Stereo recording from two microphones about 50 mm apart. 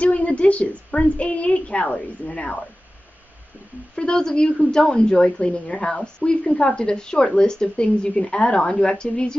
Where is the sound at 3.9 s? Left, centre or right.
Centre.